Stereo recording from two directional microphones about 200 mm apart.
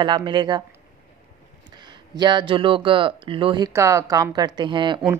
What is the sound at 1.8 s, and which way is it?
Speech, 20° right (ahead or behind).